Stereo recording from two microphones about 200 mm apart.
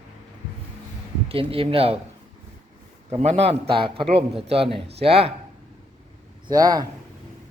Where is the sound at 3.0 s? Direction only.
30° right (ahead or behind).